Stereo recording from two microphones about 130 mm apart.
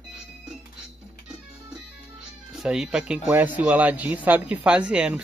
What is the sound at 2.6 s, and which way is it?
Speech, 5° right (ahead or behind).